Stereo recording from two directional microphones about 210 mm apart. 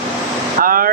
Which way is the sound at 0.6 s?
40° right (ahead or behind).